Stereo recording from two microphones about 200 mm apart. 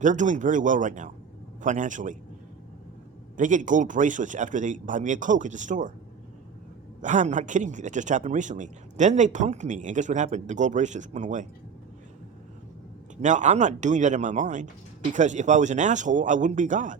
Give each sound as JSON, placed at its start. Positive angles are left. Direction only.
{"t": 0.0, "sound": "a man's voice", "side_deg": -40}
{"t": 3.3, "sound": "a man's voice", "side_deg": -40}
{"t": 7.0, "sound": "a man's voice", "side_deg": -35}
{"t": 13.2, "sound": "a man's voice", "side_deg": -40}